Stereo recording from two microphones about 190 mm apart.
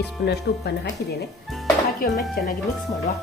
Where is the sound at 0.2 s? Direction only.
55° left (ahead or behind).